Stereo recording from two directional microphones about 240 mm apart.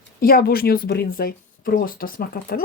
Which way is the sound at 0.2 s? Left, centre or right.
Left.